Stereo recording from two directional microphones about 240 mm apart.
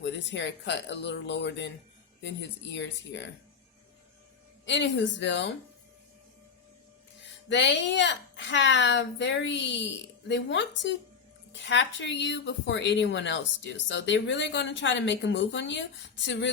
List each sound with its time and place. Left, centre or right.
0.0 s speech: left
4.6 s speech: left
7.5 s speech: left